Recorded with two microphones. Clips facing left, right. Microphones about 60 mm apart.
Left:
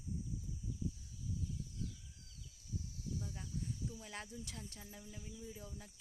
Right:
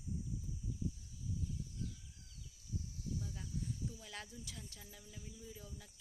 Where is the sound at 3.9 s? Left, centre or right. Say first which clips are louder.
Left 2 dB; left.